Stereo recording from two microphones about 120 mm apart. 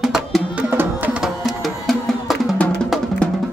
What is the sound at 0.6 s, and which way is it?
Music, 15° right (ahead or behind).